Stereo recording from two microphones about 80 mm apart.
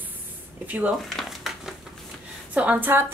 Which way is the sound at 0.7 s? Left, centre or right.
Centre.